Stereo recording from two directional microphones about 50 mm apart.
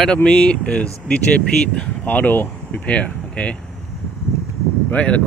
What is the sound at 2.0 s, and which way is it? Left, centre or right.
Speech, left.